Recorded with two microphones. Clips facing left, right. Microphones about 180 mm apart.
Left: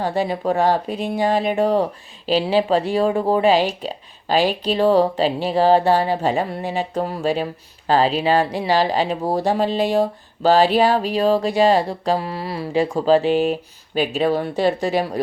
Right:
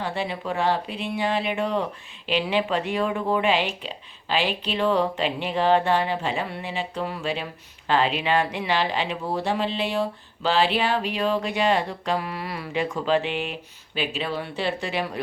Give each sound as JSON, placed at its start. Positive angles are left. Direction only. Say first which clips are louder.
{"t": 0.0, "sound": "speech", "louder": "left 8 dB", "side_deg": 40}